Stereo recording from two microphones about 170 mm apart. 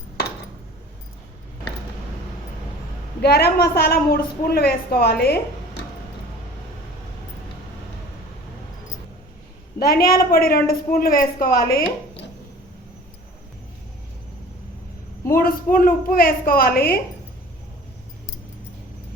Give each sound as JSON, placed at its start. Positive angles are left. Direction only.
{"t": 3.2, "sound": "a woman's voice", "side_deg": 70}
{"t": 9.7, "sound": "a woman's voice", "side_deg": 65}
{"t": 15.3, "sound": "a woman's voice", "side_deg": 55}